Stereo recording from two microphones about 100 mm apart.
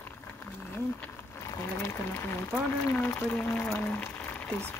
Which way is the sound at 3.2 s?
15° left (ahead or behind).